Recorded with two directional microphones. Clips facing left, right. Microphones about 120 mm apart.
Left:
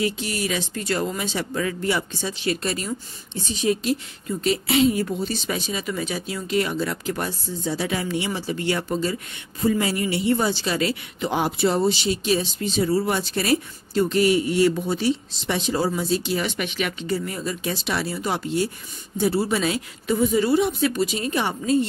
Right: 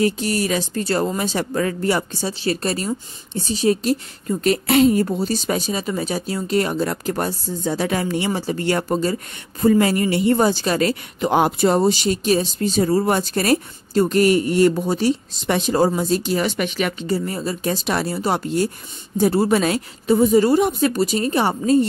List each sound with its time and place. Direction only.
0.0 s speech: 40° right (ahead or behind)
17.6 s a woman's voice: 45° right (ahead or behind)